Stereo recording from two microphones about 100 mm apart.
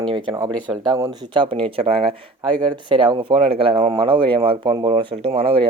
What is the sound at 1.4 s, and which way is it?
Speech, 65° right (ahead or behind).